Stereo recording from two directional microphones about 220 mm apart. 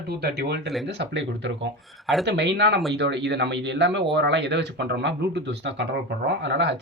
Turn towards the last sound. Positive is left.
turn(degrees=-50)  # may be behind; listen again after turning